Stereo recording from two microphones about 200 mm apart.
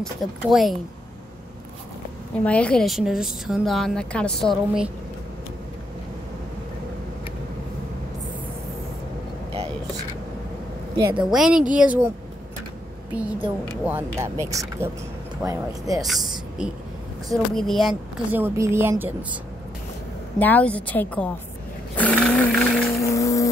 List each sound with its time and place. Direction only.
0.0 s speech: centre (ahead or behind)
2.4 s speech: 5° left (ahead or behind)
11.0 s a woman's voice: 15° right (ahead or behind)
11.2 s a woman's voice: centre (ahead or behind)
13.1 s a woman's voice: 5° right (ahead or behind)
16.1 s a woman's voice: 5° right (ahead or behind)
20.3 s a woman's voice: 10° left (ahead or behind)
21.9 s vehicle: 5° left (ahead or behind)
23.0 s vehicle: 15° left (ahead or behind)